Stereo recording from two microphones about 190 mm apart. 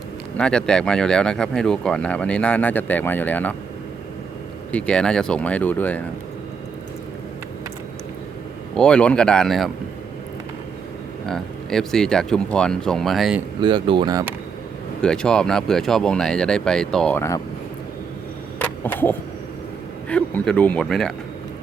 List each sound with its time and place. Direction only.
0.3 s speech: 5° left (ahead or behind)
4.7 s speech: 5° left (ahead or behind)
8.7 s speech: 5° left (ahead or behind)
11.3 s speech: centre (ahead or behind)
13.6 s speech: 25° right (ahead or behind)
15.0 s speech: 5° left (ahead or behind)
18.6 s a sound: 10° left (ahead or behind)
20.1 s speech: 5° left (ahead or behind)